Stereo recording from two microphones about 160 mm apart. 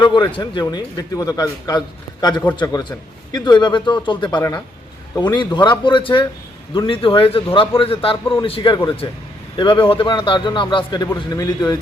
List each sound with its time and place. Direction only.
0.0 s a man's voice: 25° left (ahead or behind)
3.3 s a man's voice: 25° left (ahead or behind)